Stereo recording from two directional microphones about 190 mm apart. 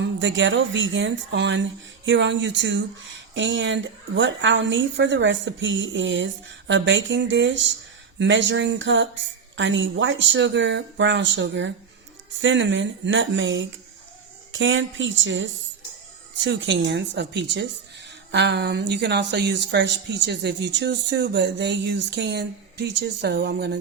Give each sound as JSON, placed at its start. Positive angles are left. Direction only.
{"t": 0.0, "sound": "a woman's voice", "side_deg": -75}
{"t": 14.5, "sound": "speech", "side_deg": -90}
{"t": 16.4, "sound": "a woman's voice", "side_deg": -70}